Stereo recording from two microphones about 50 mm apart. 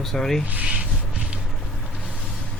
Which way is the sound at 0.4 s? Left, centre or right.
Right.